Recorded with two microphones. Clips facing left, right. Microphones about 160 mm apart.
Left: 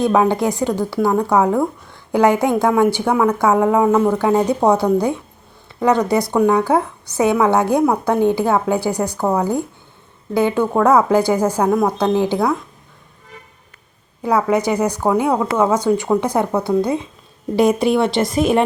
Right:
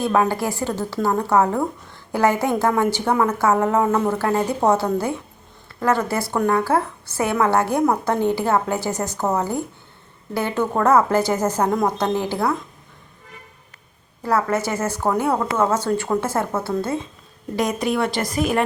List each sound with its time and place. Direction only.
0.0 s a woman's voice: 15° left (ahead or behind)
14.2 s a woman's voice: 15° left (ahead or behind)
17.6 s speech: 30° left (ahead or behind)